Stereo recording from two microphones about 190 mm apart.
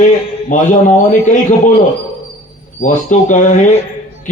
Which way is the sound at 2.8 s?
40° left (ahead or behind).